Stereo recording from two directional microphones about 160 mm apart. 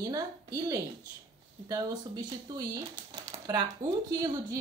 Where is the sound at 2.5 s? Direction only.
25° right (ahead or behind).